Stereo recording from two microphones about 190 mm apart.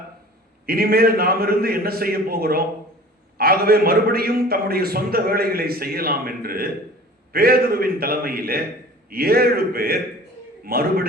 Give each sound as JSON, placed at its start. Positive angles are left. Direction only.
{"t": 0.6, "sound": "a man's voice", "side_deg": -50}